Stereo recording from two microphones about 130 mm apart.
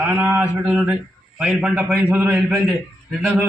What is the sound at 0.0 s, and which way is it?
A man's voice, 15° right (ahead or behind).